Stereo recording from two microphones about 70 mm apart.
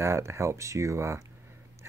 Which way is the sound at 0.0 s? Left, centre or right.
Right.